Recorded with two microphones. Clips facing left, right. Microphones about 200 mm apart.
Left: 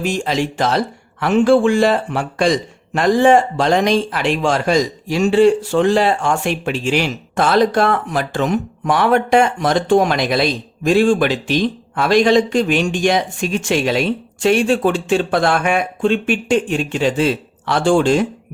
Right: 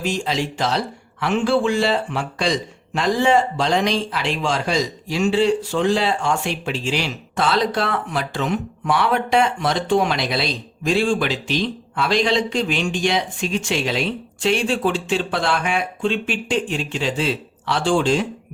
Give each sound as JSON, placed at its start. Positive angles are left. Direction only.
{"t": 0.0, "sound": "a man's voice", "side_deg": 50}